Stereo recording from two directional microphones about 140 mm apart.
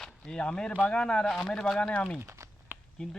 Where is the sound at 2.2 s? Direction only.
20° right (ahead or behind).